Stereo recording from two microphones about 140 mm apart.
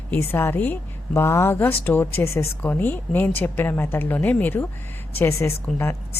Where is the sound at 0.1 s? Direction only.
15° left (ahead or behind).